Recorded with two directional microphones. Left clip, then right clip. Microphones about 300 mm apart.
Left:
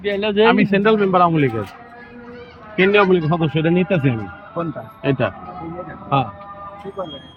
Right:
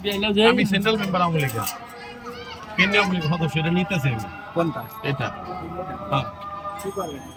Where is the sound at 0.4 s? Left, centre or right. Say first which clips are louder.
Left 5 dB; centre.